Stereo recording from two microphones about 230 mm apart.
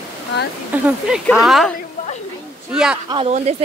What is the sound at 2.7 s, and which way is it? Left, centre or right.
Speech, centre.